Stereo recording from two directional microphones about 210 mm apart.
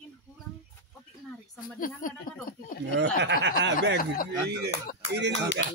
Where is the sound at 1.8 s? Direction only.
40° left (ahead or behind).